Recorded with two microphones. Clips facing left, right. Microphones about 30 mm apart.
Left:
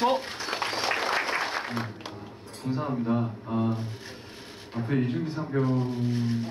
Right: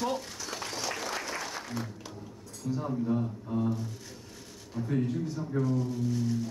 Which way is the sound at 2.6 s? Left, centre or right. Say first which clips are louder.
Left 3 dB; left.